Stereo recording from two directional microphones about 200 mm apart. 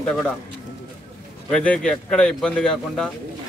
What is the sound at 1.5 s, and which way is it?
Speech, 5° left (ahead or behind).